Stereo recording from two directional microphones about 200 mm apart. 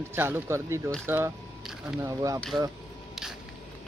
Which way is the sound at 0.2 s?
10° right (ahead or behind).